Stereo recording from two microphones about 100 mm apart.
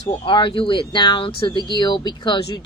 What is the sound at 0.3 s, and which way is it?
Speech, 55° left (ahead or behind).